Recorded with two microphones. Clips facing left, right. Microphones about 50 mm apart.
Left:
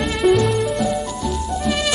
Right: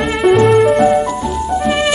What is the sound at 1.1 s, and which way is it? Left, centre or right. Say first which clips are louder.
Music: right 6 dB; right.